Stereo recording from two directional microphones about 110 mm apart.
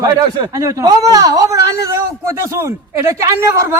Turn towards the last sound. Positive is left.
turn(degrees=-25)  # may be behind; listen again after turning